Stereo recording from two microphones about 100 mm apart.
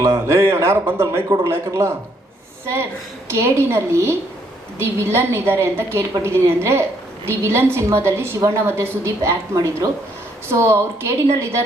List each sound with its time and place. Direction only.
0.0 s a woman's voice: 30° right (ahead or behind)
3.3 s a woman's voice: 25° right (ahead or behind)